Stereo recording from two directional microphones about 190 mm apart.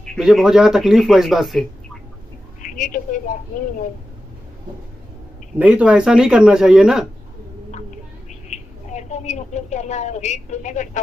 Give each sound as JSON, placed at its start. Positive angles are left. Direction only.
{"t": 0.0, "sound": "a man's voice", "side_deg": 0}
{"t": 2.6, "sound": "a sound", "side_deg": 45}
{"t": 3.3, "sound": "speech", "side_deg": 45}
{"t": 5.6, "sound": "a man's voice", "side_deg": -5}
{"t": 8.5, "sound": "a woman's voice", "side_deg": 35}